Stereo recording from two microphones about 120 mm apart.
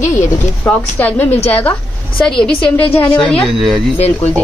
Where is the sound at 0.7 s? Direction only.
15° left (ahead or behind).